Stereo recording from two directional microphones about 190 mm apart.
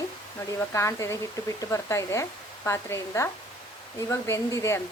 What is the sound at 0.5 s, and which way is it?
Speech, 15° left (ahead or behind).